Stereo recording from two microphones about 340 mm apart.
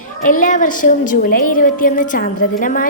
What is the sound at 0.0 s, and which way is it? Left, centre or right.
A woman's voice, left.